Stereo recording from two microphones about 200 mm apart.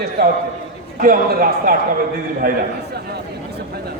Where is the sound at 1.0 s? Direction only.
45° right (ahead or behind).